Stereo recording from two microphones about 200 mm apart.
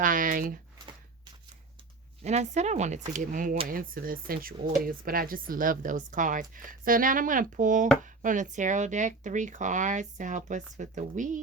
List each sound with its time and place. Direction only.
0.0 s a woman's voice: 40° right (ahead or behind)
2.2 s a woman's voice: 35° right (ahead or behind)